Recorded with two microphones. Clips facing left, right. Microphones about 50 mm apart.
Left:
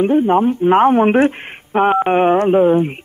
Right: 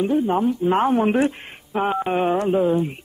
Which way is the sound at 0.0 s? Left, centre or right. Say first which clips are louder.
Left 6 dB; left.